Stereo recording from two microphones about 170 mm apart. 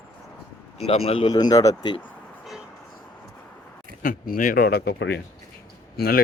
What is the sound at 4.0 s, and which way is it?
Speech, 55° left (ahead or behind).